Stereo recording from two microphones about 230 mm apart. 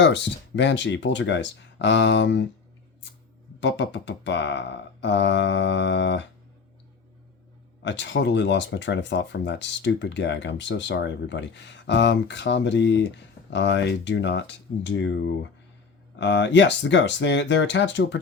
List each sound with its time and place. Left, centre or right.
0.0 s speech: left
3.6 s speech: left
7.8 s speech: left